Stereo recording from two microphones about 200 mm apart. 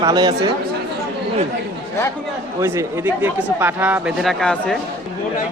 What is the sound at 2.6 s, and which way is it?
Speech, 15° right (ahead or behind).